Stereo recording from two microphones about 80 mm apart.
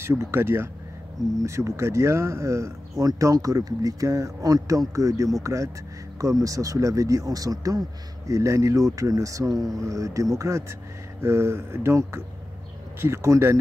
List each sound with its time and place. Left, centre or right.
0.0 s speech: right